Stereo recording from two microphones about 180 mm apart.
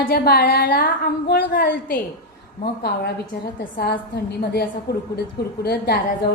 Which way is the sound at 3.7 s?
65° left (ahead or behind).